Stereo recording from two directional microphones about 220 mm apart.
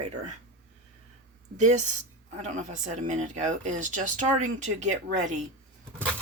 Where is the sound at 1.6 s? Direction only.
30° right (ahead or behind).